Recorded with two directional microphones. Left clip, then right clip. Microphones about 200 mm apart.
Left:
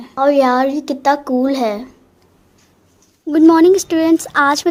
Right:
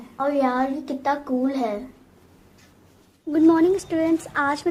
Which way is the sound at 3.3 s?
50° left (ahead or behind).